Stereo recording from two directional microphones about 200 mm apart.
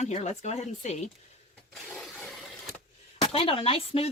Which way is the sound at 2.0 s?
Centre (ahead or behind).